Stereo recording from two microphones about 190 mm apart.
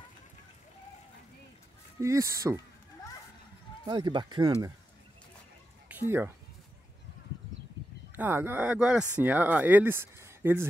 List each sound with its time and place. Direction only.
2.0 s speech: 15° right (ahead or behind)
3.8 s speech: 25° right (ahead or behind)
5.9 s speech: 10° right (ahead or behind)
8.2 s speech: 10° right (ahead or behind)